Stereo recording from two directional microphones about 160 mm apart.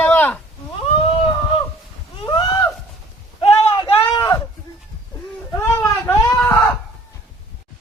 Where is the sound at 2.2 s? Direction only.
25° left (ahead or behind).